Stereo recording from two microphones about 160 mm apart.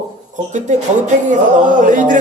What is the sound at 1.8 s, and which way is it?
Speech, 55° right (ahead or behind).